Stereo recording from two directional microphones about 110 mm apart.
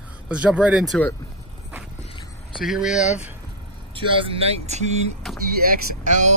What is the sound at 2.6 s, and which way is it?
Speech, 5° right (ahead or behind).